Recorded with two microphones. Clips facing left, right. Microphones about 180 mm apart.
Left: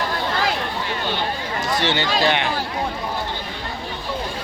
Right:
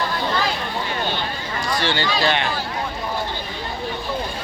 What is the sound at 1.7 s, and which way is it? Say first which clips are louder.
Speech: left 1 dB; 20° left (ahead or behind).